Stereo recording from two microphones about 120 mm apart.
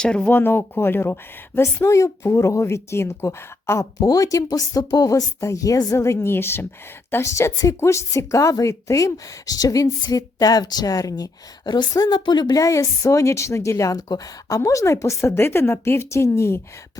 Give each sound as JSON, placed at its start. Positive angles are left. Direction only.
{"t": 0.0, "sound": "speech", "side_deg": 10}